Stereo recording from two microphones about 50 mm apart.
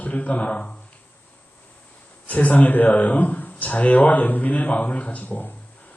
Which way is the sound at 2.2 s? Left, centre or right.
Left.